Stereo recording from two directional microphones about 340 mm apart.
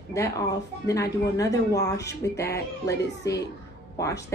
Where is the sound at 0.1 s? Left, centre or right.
Centre.